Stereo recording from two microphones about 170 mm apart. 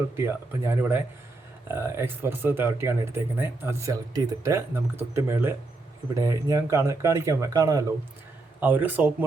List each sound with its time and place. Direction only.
0.2 s speech: 15° right (ahead or behind)